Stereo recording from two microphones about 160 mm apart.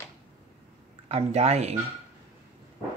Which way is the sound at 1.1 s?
40° right (ahead or behind).